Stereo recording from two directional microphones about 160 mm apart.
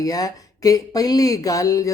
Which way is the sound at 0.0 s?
20° left (ahead or behind).